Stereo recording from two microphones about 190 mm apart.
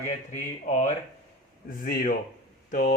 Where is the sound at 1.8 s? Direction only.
50° left (ahead or behind).